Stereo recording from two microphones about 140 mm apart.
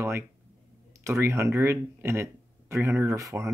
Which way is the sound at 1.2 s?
20° right (ahead or behind).